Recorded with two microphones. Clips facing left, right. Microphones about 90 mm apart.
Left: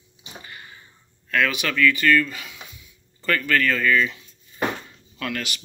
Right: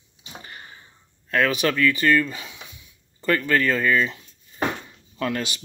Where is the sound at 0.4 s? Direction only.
30° right (ahead or behind).